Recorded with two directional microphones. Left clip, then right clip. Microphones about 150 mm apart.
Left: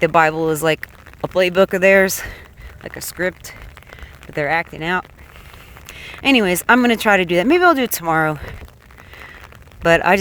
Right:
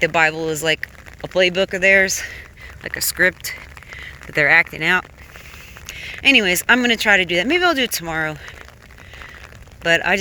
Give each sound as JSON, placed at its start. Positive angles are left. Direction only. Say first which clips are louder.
{"t": 0.0, "sound": "speech", "louder": "left 2 dB", "side_deg": 45}
{"t": 2.8, "sound": "speech", "louder": "right 5 dB", "side_deg": 20}
{"t": 5.9, "sound": "speech", "louder": "right 2 dB", "side_deg": 40}
{"t": 9.8, "sound": "speech", "louder": "left 3 dB", "side_deg": 45}